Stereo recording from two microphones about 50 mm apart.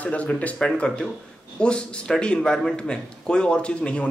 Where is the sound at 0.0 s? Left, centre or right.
Left.